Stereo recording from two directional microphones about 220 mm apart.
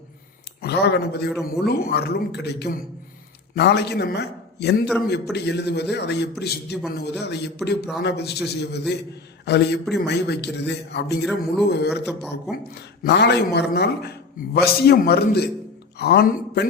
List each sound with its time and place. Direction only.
0.6 s a man's voice: 50° left (ahead or behind)
12.0 s speech: centre (ahead or behind)
13.0 s a man's voice: 50° left (ahead or behind)